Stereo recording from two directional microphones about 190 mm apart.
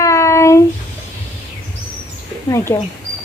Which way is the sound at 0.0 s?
15° left (ahead or behind).